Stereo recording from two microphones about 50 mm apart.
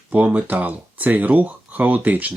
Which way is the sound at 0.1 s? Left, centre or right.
Right.